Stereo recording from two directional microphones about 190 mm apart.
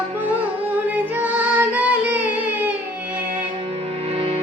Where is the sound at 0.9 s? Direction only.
10° right (ahead or behind).